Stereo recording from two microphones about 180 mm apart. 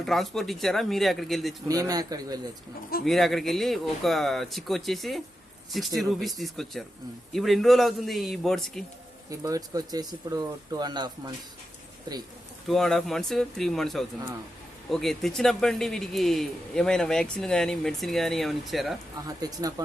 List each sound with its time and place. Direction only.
0.0 s a man's voice: centre (ahead or behind)
1.6 s speech: 20° right (ahead or behind)
3.0 s a man's voice: centre (ahead or behind)
9.3 s speech: 20° right (ahead or behind)
12.6 s a man's voice: centre (ahead or behind)
19.1 s speech: 20° right (ahead or behind)